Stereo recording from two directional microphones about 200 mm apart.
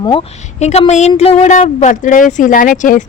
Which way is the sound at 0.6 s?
35° left (ahead or behind).